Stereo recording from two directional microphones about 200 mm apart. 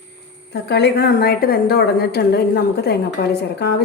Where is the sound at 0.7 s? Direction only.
55° left (ahead or behind).